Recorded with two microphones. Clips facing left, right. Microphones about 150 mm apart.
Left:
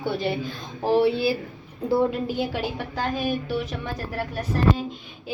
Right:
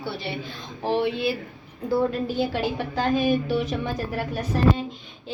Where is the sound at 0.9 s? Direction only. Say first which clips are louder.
Left 4 dB; 35° left (ahead or behind).